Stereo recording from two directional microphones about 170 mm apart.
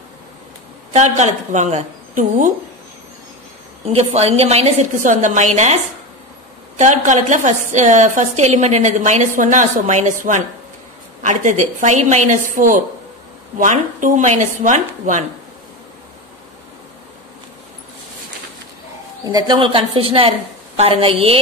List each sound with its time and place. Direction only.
0.9 s a woman's voice: 40° right (ahead or behind)
3.8 s a woman's voice: 40° right (ahead or behind)
6.8 s a woman's voice: 45° right (ahead or behind)
19.2 s a woman's voice: 25° right (ahead or behind)